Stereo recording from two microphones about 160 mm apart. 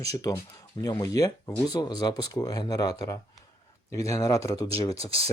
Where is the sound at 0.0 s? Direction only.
20° left (ahead or behind).